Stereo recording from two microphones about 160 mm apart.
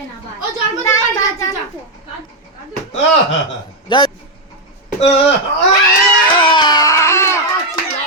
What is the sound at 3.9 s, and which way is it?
Speech, 30° left (ahead or behind).